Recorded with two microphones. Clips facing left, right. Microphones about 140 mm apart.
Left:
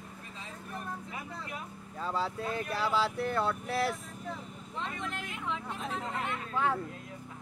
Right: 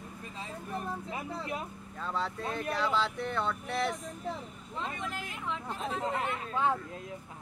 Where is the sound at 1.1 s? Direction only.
30° right (ahead or behind).